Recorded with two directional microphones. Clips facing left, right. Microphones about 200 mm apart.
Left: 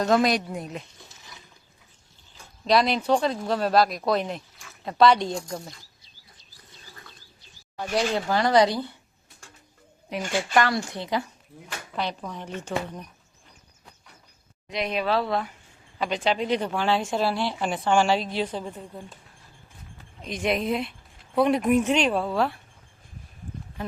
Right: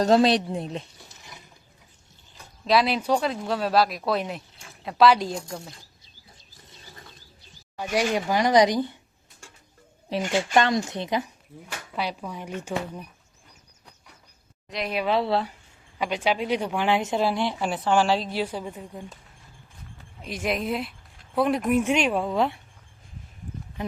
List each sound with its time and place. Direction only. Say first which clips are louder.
0.0 s speech: right 3 dB; 30° right (ahead or behind)
2.6 s speech: left 1 dB; 5° right (ahead or behind)
4.5 s a sound: right 1 dB; 30° right (ahead or behind)
4.9 s speech: even; 5° right (ahead or behind)
7.8 s speech: right 1 dB; 10° right (ahead or behind)
10.1 s speech: right 2 dB; 25° right (ahead or behind)
11.9 s speech: even; 10° right (ahead or behind)
14.7 s speech: left 1 dB; centre (ahead or behind)
15.0 s speech: right 4 dB; 20° right (ahead or behind)
16.0 s speech: even; 10° right (ahead or behind)
17.6 s speech: left 1 dB; 5° right (ahead or behind)
20.2 s speech: left 2 dB; 5° right (ahead or behind); by 22.6 s 20° right (ahead or behind)